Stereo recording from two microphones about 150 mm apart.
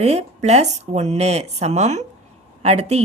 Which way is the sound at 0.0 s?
45° right (ahead or behind).